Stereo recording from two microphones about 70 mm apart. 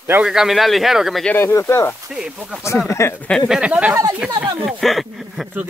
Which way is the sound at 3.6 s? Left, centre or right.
Centre.